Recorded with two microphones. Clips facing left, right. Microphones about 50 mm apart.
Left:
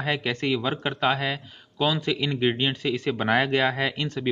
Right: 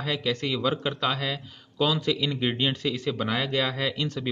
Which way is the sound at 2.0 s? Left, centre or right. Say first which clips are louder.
Left 2 dB; left.